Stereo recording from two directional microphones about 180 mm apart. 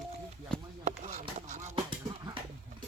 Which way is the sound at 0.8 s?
40° right (ahead or behind).